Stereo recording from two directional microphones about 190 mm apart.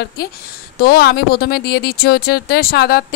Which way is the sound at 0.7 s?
55° left (ahead or behind).